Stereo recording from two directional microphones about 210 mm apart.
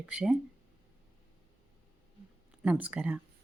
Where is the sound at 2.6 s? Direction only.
5° right (ahead or behind).